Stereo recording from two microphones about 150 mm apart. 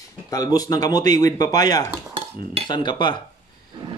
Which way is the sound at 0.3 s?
25° left (ahead or behind).